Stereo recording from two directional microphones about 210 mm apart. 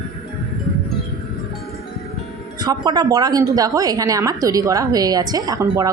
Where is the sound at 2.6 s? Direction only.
20° right (ahead or behind).